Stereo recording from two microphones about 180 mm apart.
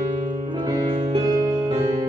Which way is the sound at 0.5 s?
25° right (ahead or behind).